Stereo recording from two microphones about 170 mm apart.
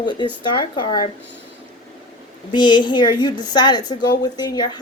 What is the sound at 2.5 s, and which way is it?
Speech, 25° left (ahead or behind).